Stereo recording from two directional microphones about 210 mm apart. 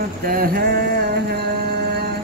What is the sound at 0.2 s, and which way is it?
Mantra, 45° right (ahead or behind).